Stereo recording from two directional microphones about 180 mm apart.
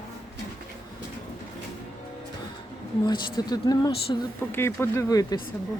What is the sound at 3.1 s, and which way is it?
Speech, 25° left (ahead or behind).